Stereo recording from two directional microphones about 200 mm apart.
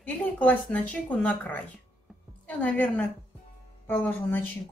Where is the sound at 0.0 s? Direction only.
5° left (ahead or behind).